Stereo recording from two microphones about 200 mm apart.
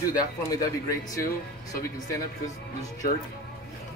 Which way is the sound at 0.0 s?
15° left (ahead or behind).